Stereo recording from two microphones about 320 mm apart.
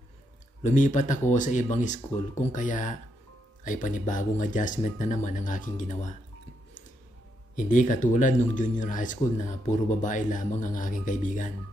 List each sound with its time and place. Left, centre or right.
0.7 s speech: left
7.5 s speech: left